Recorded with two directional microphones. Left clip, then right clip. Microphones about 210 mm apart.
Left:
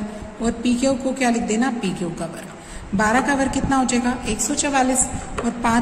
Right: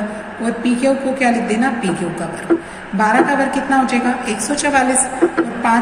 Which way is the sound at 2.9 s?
55° left (ahead or behind).